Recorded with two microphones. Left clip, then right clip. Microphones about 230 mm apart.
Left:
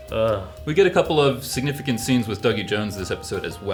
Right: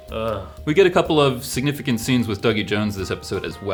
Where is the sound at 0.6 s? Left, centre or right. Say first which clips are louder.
Right 2 dB; right.